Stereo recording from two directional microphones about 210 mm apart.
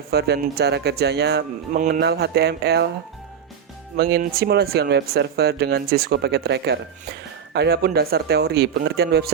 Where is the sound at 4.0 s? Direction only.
45° right (ahead or behind).